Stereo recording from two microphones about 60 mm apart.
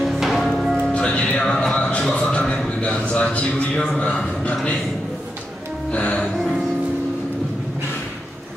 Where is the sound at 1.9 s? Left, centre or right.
Centre.